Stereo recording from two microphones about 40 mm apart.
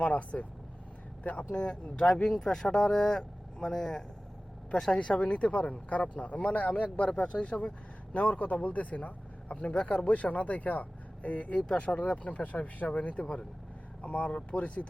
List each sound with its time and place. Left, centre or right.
0.0 s speech: left
1.5 s speech: left
2.3 s speech: centre
4.9 s speech: left